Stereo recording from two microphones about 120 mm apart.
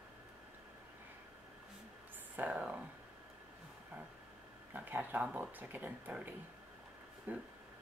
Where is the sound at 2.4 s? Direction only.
10° right (ahead or behind).